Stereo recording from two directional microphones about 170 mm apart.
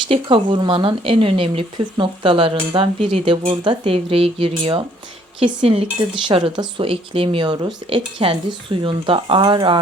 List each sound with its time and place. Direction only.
0.1 s speech: 30° right (ahead or behind)